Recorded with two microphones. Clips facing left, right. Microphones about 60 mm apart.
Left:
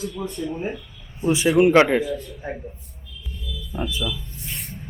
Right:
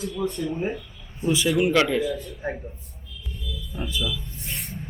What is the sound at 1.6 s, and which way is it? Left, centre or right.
Speech, left.